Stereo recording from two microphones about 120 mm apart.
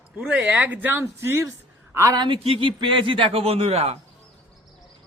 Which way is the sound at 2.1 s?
40° right (ahead or behind).